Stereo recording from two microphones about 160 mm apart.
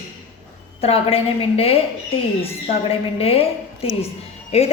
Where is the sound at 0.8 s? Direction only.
35° left (ahead or behind).